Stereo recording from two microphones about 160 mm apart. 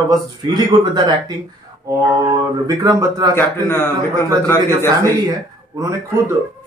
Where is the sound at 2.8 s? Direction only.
20° right (ahead or behind).